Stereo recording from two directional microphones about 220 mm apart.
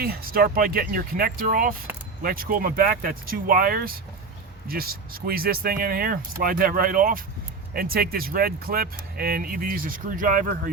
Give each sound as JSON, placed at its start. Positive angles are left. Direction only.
{"t": 0.0, "sound": "speech", "side_deg": -40}